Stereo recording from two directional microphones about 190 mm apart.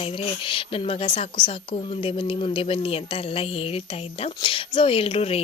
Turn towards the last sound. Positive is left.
turn(degrees=30)  # may be behind; listen again after turning